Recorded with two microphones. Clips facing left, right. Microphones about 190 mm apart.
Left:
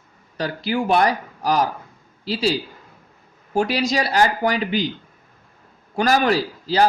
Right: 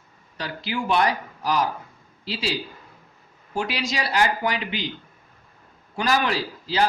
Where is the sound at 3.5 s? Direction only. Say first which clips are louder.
Left 7 dB; 40° left (ahead or behind).